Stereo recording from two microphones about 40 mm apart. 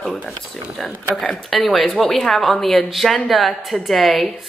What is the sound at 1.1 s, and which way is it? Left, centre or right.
Speech, centre.